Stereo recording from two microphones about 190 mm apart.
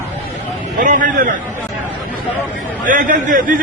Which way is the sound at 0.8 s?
45° right (ahead or behind).